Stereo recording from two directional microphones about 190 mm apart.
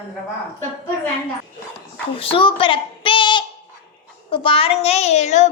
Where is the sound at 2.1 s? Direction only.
30° left (ahead or behind).